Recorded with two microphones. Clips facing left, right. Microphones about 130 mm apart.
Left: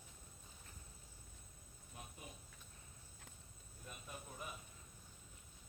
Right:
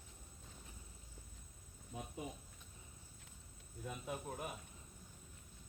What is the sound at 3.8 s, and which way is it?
Speech, 80° right.